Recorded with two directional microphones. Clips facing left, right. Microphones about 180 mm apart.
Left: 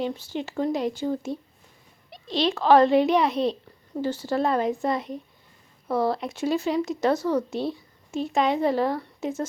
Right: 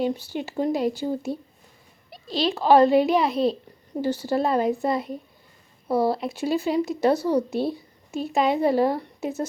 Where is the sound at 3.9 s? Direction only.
15° right (ahead or behind).